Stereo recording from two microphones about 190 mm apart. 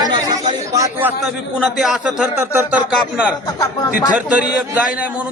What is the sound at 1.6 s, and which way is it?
Speech, centre (ahead or behind).